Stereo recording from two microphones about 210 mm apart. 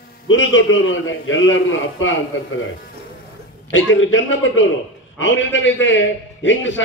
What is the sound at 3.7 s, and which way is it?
A man's voice, 65° left (ahead or behind).